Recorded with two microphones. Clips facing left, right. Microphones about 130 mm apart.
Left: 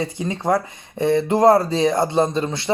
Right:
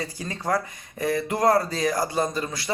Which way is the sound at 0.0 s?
25° left (ahead or behind).